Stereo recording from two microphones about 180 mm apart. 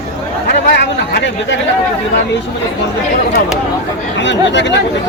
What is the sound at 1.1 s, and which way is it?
Speech, 90° left.